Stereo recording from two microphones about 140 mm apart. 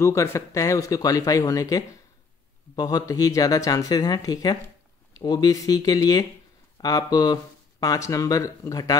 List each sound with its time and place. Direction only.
0.0 s speech: 20° left (ahead or behind)